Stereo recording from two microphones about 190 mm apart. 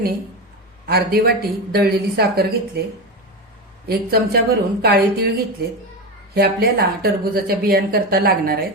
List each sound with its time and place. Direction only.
0.9 s speech: 55° right (ahead or behind)
3.8 s speech: 55° right (ahead or behind)
6.3 s a woman's voice: 55° right (ahead or behind)